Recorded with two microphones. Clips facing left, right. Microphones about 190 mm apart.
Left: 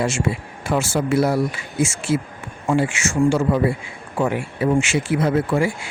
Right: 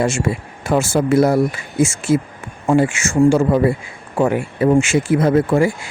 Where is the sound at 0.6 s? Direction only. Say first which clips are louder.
Right 4 dB; 50° right (ahead or behind).